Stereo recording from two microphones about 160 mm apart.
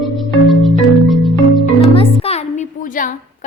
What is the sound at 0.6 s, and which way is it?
Marimba, centre (ahead or behind).